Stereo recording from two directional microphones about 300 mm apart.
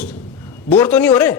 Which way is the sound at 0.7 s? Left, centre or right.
Centre.